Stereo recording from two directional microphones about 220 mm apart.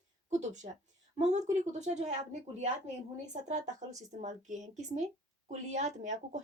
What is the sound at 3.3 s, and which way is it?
A woman's voice, 35° right (ahead or behind).